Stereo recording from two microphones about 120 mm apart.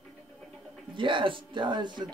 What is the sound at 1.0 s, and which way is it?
Speech, 45° right (ahead or behind).